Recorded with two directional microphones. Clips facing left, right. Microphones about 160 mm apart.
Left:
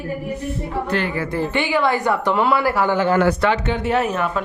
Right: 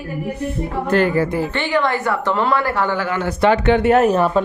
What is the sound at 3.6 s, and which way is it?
Speech, 65° right (ahead or behind).